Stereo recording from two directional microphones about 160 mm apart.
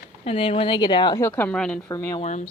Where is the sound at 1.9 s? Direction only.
20° left (ahead or behind).